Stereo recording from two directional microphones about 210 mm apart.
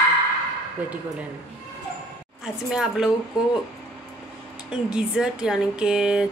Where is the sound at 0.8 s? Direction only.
5° right (ahead or behind).